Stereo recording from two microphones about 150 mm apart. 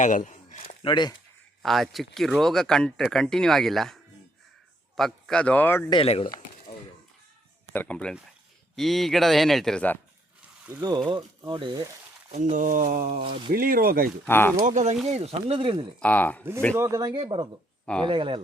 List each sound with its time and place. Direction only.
0.0 s a sound: 55° left (ahead or behind)
0.9 s speech: 30° left (ahead or behind)
1.6 s speech: centre (ahead or behind)
4.9 s a man's voice: 5° left (ahead or behind)
5.9 s speech: 40° left (ahead or behind)
7.7 s a man's voice: 10° left (ahead or behind)
10.7 s speech: 25° right (ahead or behind)
12.3 s mantra: 55° right (ahead or behind)
13.5 s speech: 75° right (ahead or behind)
14.3 s a man's voice: 15° left (ahead or behind)
14.6 s speech: 50° right (ahead or behind); by 15.8 s 35° right (ahead or behind)
16.0 s a man's voice: 10° left (ahead or behind)
16.7 s speech: 20° right (ahead or behind)
17.1 s speech: 30° right (ahead or behind)